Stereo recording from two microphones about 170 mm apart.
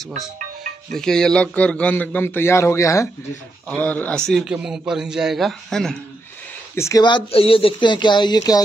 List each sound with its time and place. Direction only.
0.9 s a man's voice: 5° left (ahead or behind)
6.7 s speech: 20° left (ahead or behind)